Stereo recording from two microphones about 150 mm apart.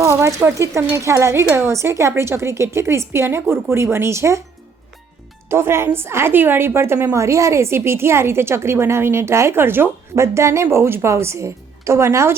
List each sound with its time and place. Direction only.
0.0 s a woman's voice: 20° right (ahead or behind)
5.5 s a woman's voice: 15° right (ahead or behind)